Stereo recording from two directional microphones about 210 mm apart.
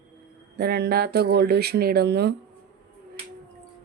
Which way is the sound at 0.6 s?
50° right (ahead or behind).